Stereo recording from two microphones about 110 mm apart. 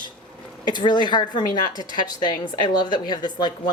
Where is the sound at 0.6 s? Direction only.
40° left (ahead or behind).